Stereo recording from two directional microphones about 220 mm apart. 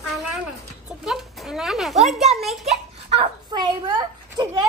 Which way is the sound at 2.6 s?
30° right (ahead or behind).